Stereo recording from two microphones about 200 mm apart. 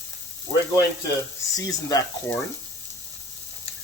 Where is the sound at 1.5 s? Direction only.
20° left (ahead or behind).